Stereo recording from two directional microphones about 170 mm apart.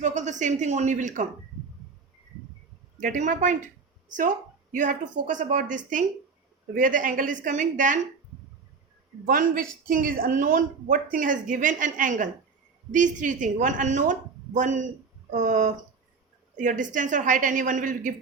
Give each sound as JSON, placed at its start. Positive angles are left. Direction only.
{"t": 0.0, "sound": "speech", "side_deg": -45}
{"t": 3.0, "sound": "speech", "side_deg": -50}
{"t": 9.2, "sound": "speech", "side_deg": -55}